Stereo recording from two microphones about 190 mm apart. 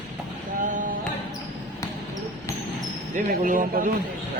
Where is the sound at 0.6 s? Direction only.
45° right (ahead or behind).